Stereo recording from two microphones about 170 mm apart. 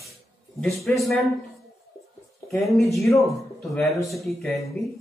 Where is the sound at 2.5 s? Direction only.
Centre (ahead or behind).